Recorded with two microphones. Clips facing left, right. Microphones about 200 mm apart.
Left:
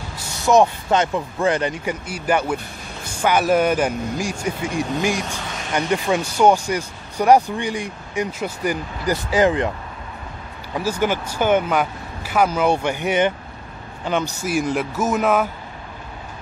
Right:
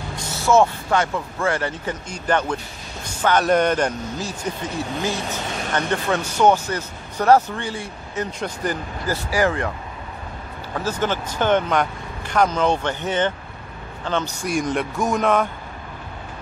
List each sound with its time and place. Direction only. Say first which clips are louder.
0.4 s speech: left 1 dB; 15° left (ahead or behind)
10.7 s speech: left 2 dB; 10° left (ahead or behind)